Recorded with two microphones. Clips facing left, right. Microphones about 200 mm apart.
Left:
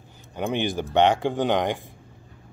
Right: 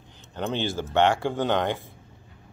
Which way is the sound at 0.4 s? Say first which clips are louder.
Left 2 dB; 15° left (ahead or behind).